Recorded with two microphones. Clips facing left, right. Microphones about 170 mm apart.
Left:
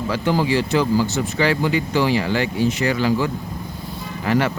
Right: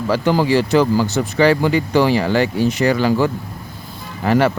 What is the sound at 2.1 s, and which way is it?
Speech, 40° right (ahead or behind).